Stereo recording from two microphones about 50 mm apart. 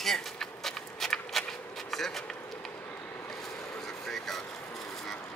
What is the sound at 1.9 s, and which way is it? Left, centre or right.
Speech, centre.